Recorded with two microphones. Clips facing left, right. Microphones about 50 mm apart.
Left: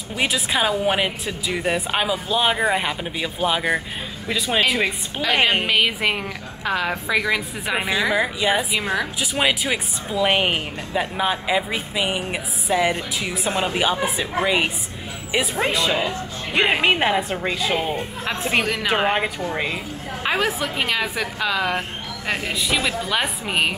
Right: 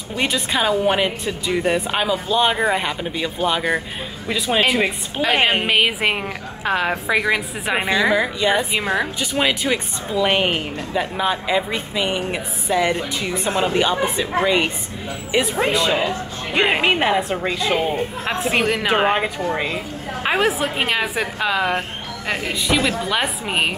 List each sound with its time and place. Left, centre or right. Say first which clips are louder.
0.1 s a woman's voice: right 1 dB; centre
5.7 s a woman's voice: right 2 dB; right
7.8 s a woman's voice: right 3 dB; centre
8.7 s a woman's voice: right 2 dB; centre
9.2 s a woman's voice: right 1 dB; centre
20.6 s a woman's voice: right 2 dB; right
22.3 s a woman's voice: right 2 dB; centre